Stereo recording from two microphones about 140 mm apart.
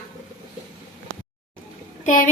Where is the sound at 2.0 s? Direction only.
75° left (ahead or behind).